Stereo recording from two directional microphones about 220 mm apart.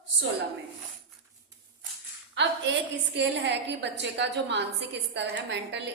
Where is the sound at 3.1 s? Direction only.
50° right (ahead or behind).